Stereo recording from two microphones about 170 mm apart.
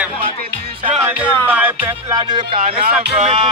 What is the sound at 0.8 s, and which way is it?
Music, 10° right (ahead or behind).